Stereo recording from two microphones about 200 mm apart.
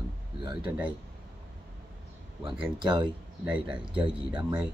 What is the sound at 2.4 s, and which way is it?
Speech, 25° right (ahead or behind).